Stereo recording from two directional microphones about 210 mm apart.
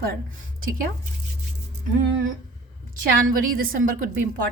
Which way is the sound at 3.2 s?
45° right (ahead or behind).